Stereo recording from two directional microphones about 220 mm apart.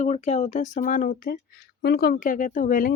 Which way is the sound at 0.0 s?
30° left (ahead or behind).